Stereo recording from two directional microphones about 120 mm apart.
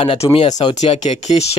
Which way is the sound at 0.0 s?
50° left (ahead or behind).